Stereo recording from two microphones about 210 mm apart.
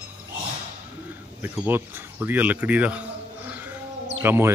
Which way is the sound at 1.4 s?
10° right (ahead or behind).